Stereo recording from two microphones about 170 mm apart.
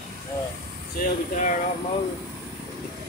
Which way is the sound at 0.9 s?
45° left (ahead or behind).